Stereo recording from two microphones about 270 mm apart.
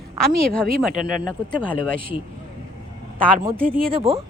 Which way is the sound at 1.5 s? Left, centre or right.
Centre.